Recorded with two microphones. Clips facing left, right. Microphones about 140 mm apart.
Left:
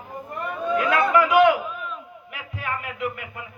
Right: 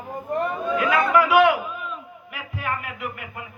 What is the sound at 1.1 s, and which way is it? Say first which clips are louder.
A man's voice: even; 5° right (ahead or behind).